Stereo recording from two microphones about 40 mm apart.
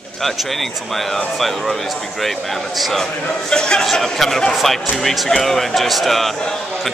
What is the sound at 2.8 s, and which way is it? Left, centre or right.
Speech, centre.